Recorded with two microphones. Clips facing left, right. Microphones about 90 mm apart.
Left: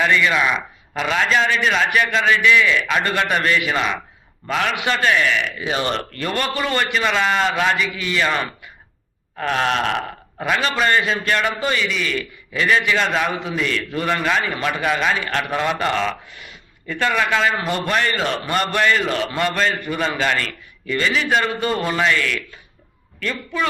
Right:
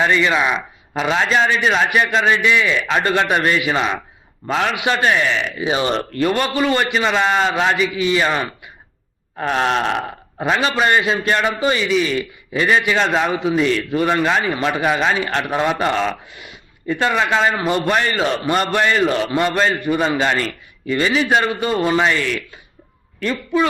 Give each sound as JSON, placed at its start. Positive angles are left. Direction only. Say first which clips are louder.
{"t": 0.0, "sound": "a man's voice", "louder": "right 1 dB", "side_deg": -25}
{"t": 1.9, "sound": "a man's voice", "louder": "right 2 dB", "side_deg": -20}
{"t": 5.5, "sound": "a man's voice", "louder": "right 3 dB", "side_deg": -15}
{"t": 9.4, "sound": "a man's voice", "louder": "right 2 dB", "side_deg": -20}
{"t": 18.0, "sound": "a man's voice", "louder": "right 3 dB", "side_deg": -15}